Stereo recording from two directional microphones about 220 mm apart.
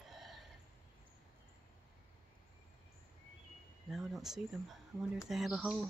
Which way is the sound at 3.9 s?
Centre (ahead or behind).